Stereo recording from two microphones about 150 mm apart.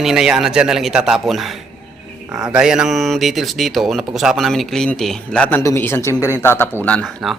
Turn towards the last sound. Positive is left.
turn(degrees=10)  # may be behind; listen again after turning